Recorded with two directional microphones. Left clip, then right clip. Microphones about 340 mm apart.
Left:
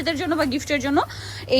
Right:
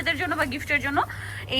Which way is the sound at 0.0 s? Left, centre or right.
Centre.